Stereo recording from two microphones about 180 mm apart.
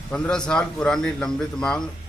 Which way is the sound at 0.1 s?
5° left (ahead or behind).